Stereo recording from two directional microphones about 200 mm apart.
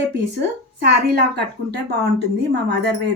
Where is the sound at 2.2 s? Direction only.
55° right (ahead or behind).